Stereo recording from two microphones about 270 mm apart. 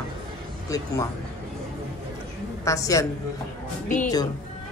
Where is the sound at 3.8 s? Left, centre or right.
Left.